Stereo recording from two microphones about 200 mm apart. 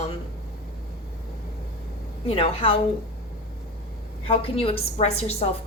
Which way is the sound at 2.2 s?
30° left (ahead or behind).